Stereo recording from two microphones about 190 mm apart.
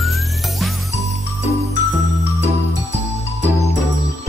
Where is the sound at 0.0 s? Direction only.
Centre (ahead or behind).